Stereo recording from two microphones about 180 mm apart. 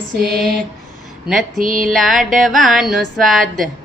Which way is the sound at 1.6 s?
50° right (ahead or behind).